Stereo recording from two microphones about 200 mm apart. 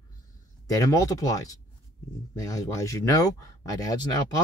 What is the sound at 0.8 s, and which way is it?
Speech, 15° left (ahead or behind).